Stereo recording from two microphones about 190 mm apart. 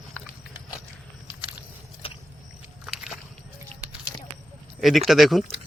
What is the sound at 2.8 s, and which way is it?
Walk, 5° right (ahead or behind).